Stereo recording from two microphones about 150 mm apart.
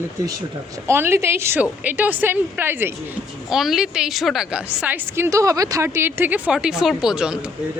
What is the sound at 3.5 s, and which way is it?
A woman's voice, centre (ahead or behind).